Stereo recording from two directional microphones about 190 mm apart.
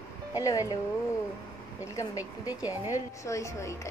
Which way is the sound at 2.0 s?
20° left (ahead or behind).